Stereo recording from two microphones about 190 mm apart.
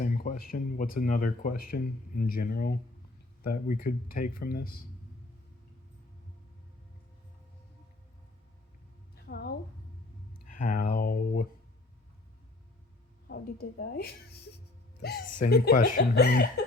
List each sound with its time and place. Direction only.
0.0 s speech: 45° left (ahead or behind)
9.2 s a sound: 55° left (ahead or behind)
10.4 s speech: 45° left (ahead or behind)
13.2 s a woman's voice: 55° left (ahead or behind)